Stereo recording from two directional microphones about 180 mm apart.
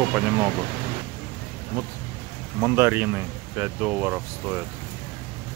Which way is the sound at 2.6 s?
15° right (ahead or behind).